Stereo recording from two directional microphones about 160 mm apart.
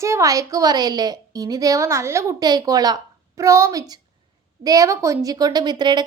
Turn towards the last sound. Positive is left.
turn(degrees=-25)  # may be behind; listen again after turning